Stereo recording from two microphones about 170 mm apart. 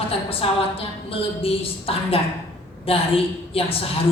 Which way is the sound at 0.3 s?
35° left (ahead or behind).